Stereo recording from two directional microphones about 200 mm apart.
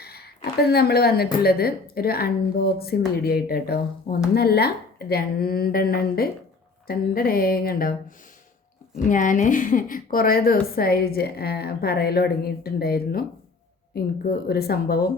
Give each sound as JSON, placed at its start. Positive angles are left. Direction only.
{"t": 0.0, "sound": "a sound", "side_deg": 50}
{"t": 0.7, "sound": "a woman's voice", "side_deg": 50}
{"t": 9.0, "sound": "a woman's voice", "side_deg": 40}